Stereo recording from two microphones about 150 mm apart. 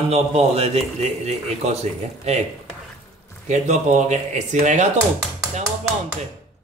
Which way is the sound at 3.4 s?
50° right (ahead or behind).